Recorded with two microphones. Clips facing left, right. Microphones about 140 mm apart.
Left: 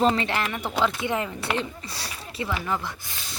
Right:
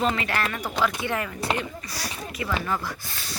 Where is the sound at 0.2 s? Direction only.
20° left (ahead or behind).